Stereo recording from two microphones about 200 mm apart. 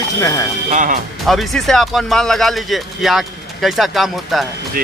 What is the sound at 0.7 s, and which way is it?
Speech, 40° right (ahead or behind).